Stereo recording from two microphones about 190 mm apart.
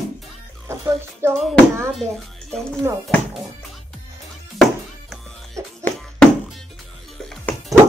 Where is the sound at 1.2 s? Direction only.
15° right (ahead or behind).